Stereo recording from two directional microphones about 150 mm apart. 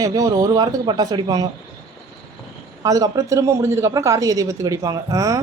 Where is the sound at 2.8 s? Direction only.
25° right (ahead or behind).